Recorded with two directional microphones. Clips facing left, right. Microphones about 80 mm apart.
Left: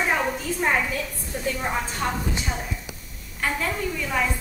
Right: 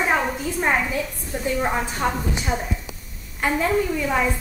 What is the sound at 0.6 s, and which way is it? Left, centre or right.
A woman's voice, centre.